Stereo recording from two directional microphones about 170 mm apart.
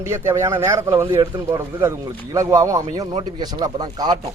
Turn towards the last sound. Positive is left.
turn(degrees=-25)  # may be behind; listen again after turning